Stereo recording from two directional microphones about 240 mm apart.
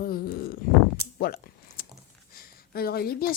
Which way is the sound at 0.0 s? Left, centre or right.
Left.